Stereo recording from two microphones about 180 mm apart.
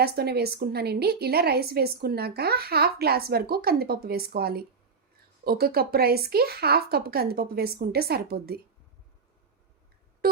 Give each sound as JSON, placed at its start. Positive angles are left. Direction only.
{"t": 0.0, "sound": "a woman's voice", "side_deg": -60}